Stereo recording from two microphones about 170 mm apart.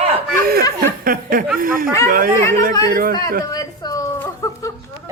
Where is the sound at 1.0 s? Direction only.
55° right (ahead or behind).